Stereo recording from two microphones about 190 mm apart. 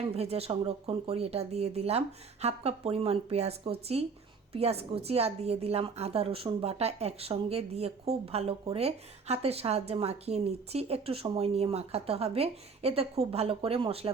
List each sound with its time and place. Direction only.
0.2 s a woman's voice: 30° right (ahead or behind)